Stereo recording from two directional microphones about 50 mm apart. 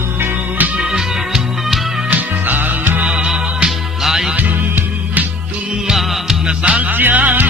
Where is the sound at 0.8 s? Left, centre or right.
Centre.